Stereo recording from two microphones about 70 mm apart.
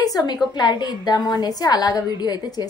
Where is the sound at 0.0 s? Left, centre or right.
Left.